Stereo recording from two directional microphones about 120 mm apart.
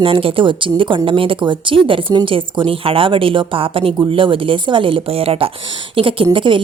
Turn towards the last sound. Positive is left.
turn(degrees=-45)  # may be behind; listen again after turning